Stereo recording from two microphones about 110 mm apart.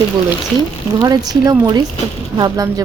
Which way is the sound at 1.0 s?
35° right (ahead or behind).